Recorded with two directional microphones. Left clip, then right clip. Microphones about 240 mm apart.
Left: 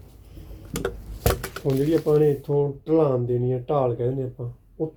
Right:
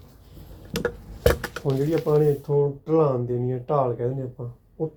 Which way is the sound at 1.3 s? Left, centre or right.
Left.